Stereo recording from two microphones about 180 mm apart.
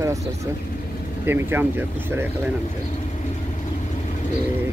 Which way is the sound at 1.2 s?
10° right (ahead or behind).